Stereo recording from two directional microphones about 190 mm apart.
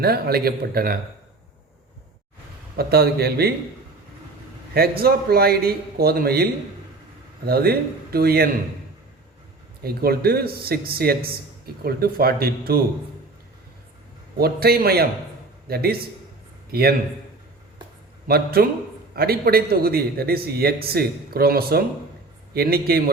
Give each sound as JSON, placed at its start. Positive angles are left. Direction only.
{"t": 0.0, "sound": "a man's voice", "side_deg": -55}
{"t": 2.7, "sound": "a man's voice", "side_deg": -55}
{"t": 4.7, "sound": "a man's voice", "side_deg": -55}
{"t": 9.8, "sound": "a man's voice", "side_deg": -55}
{"t": 14.3, "sound": "a man's voice", "side_deg": -55}
{"t": 18.3, "sound": "a man's voice", "side_deg": -55}